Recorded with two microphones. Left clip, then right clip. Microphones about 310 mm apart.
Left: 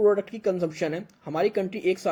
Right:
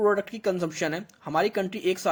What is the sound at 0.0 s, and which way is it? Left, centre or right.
Speech, right.